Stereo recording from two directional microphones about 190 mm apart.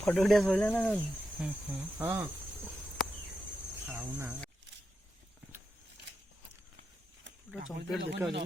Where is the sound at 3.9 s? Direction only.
10° right (ahead or behind).